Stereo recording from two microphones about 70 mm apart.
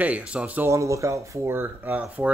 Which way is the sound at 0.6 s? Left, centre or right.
Right.